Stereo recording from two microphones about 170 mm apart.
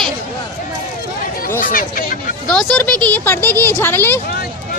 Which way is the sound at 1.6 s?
55° left (ahead or behind).